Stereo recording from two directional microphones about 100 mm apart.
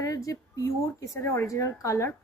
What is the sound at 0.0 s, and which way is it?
A woman's voice, 35° left (ahead or behind).